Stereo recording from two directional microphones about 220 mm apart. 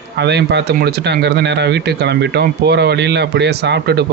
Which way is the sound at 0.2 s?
50° right (ahead or behind).